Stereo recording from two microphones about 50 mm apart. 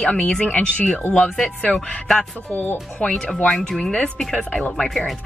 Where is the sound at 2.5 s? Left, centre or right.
Left.